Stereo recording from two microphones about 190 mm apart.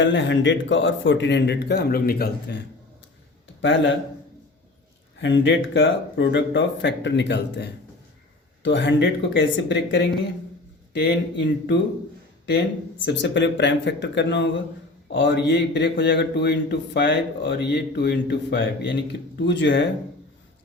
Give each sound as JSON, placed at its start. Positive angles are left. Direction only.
{"t": 0.0, "sound": "speech", "side_deg": 75}
{"t": 3.6, "sound": "speech", "side_deg": 75}
{"t": 5.1, "sound": "speech", "side_deg": 75}
{"t": 13.1, "sound": "speech", "side_deg": 70}